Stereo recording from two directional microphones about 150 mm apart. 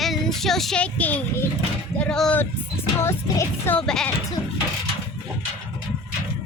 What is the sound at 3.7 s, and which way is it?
Speech, 5° left (ahead or behind).